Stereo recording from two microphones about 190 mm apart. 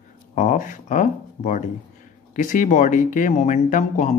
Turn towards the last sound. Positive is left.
turn(degrees=40)  # may be behind; listen again after turning